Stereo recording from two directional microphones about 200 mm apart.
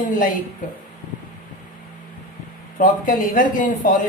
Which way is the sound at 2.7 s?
40° left (ahead or behind).